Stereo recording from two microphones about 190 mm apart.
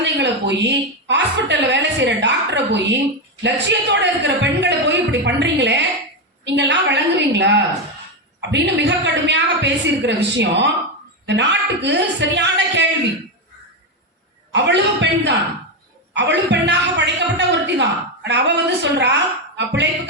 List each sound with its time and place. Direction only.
0.0 s a woman's voice: 65° right (ahead or behind)
14.5 s a woman's voice: 65° right (ahead or behind)